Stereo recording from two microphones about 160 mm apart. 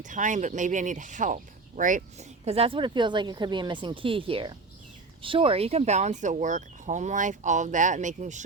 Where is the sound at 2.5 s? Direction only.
35° right (ahead or behind).